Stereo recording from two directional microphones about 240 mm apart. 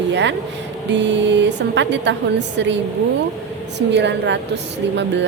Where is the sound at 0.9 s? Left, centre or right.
Right.